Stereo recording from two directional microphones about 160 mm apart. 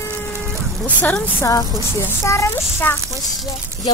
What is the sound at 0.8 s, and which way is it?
A child's voice, 10° left (ahead or behind).